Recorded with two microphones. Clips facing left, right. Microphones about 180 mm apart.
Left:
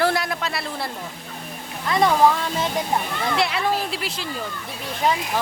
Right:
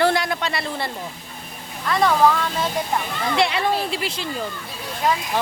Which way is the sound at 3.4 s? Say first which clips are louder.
Right 3 dB; centre (ahead or behind).